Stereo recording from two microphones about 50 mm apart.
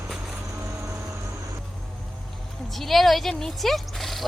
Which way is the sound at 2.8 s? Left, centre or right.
Centre.